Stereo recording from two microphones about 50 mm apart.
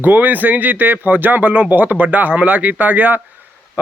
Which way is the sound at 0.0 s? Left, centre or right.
Right.